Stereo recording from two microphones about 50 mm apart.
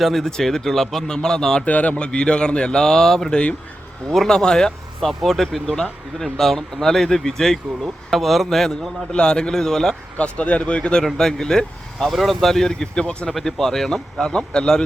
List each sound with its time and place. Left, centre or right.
0.0 s speech: centre
1.6 s a man's voice: left; by 8.9 s centre
9.1 s speech: centre
10.2 s a man's voice: left
12.0 s speech: centre
13.3 s speech: centre